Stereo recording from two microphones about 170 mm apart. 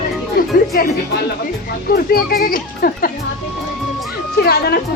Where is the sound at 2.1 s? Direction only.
60° left (ahead or behind).